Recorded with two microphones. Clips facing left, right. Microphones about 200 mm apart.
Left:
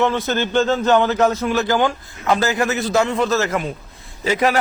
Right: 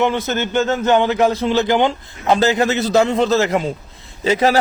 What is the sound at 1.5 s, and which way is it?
A man's voice, 20° right (ahead or behind).